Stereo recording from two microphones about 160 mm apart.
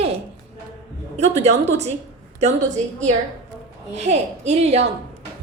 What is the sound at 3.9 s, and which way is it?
Speech, 45° right (ahead or behind).